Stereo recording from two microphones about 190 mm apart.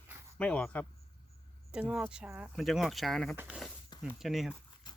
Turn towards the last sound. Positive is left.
turn(degrees=0)  # may be behind; listen again after turning